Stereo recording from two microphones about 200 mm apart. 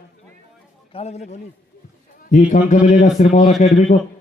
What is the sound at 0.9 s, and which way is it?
A man's voice, 30° left (ahead or behind).